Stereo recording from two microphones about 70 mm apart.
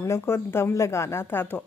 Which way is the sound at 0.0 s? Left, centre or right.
Left.